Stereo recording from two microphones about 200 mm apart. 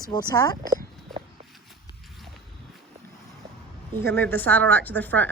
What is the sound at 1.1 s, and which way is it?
Walk, centre (ahead or behind).